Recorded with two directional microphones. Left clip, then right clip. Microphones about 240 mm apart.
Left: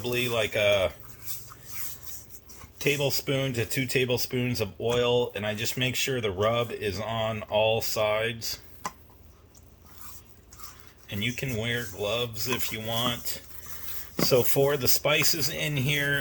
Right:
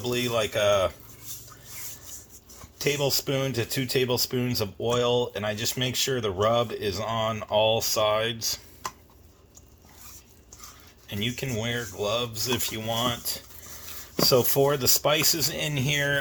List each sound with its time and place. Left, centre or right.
0.0 s speech: centre
2.7 s speech: right
11.1 s speech: right